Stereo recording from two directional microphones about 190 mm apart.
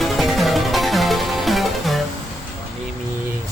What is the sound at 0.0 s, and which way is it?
Music, centre (ahead or behind).